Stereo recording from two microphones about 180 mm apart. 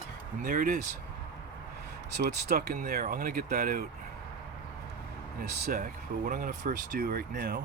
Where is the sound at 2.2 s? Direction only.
50° right (ahead or behind).